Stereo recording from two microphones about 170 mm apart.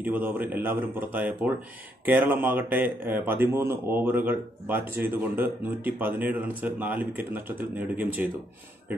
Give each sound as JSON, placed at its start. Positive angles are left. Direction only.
{"t": 0.0, "sound": "speech", "side_deg": -10}